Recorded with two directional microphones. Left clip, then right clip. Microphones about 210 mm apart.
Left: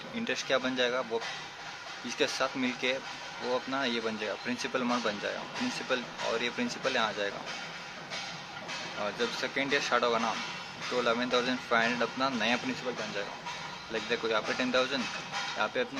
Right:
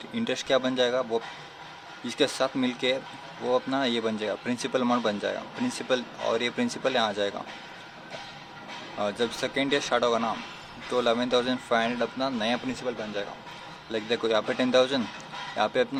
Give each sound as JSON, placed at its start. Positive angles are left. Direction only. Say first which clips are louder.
{"t": 0.3, "sound": "speech", "louder": "right 4 dB", "side_deg": -30}
{"t": 9.0, "sound": "speech", "louder": "right 5 dB", "side_deg": -25}
{"t": 13.9, "sound": "speech", "louder": "right 5 dB", "side_deg": -30}